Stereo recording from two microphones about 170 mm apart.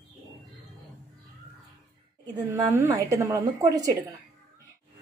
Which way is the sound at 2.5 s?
20° right (ahead or behind).